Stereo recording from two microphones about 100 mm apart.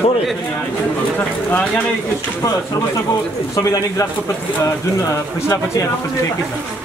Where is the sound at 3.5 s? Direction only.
30° left (ahead or behind).